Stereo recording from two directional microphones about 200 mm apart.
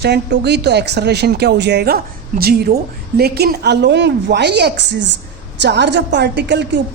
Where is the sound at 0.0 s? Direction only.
55° right (ahead or behind).